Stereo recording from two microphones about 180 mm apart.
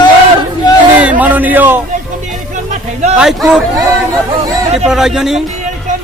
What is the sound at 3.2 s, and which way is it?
Speech, 5° right (ahead or behind).